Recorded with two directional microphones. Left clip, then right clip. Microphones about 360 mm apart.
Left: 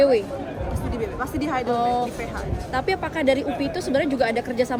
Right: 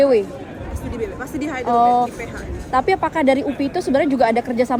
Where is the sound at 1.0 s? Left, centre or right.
Centre.